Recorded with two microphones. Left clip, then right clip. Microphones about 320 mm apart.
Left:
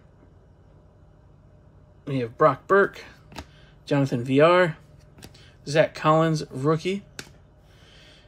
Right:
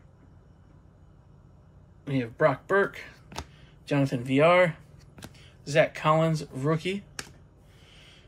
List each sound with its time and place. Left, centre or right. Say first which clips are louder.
2.0 s speech: left 4 dB; centre
7.9 s rub: left 2 dB; centre